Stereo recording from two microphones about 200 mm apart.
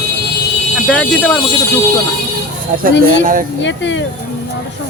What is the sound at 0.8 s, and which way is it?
Speech, 5° left (ahead or behind).